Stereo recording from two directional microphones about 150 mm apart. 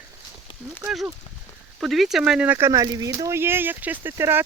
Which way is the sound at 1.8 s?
Centre (ahead or behind).